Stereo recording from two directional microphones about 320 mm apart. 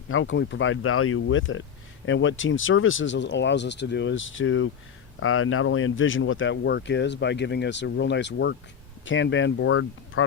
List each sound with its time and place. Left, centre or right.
0.1 s speech: left